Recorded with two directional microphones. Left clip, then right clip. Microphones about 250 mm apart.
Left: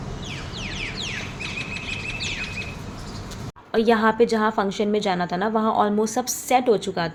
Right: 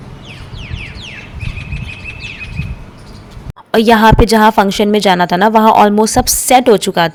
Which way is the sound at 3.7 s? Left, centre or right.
Right.